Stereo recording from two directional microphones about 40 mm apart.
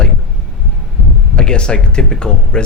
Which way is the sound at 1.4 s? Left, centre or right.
Left.